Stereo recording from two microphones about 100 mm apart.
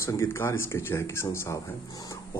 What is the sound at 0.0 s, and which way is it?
Speech, 25° left (ahead or behind).